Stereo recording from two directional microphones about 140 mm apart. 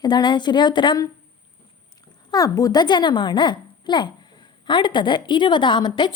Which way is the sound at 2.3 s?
25° left (ahead or behind).